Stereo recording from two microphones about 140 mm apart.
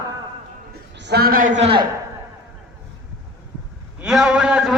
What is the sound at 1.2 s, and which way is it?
Speech, 80° right.